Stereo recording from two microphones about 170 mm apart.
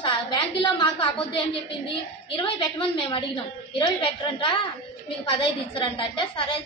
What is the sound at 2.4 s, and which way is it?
A woman's voice, 30° left (ahead or behind).